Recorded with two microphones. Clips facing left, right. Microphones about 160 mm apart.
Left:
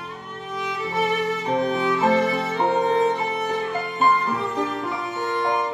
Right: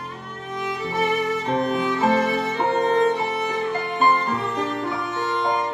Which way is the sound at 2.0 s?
Centre (ahead or behind).